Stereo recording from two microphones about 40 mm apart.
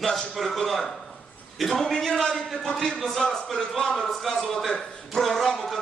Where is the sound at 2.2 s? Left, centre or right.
Centre.